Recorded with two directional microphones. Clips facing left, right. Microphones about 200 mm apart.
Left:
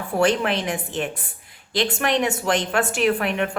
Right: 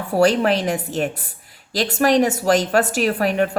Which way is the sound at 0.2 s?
40° right (ahead or behind).